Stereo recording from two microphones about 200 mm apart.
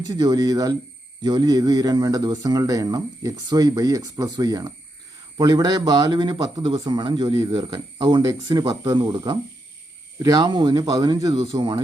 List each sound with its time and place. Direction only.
0.1 s speech: 20° right (ahead or behind)